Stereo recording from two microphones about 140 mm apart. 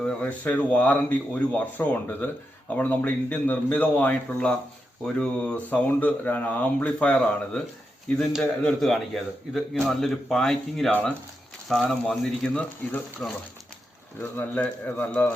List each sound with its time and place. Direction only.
0.0 s a man's voice: 10° left (ahead or behind)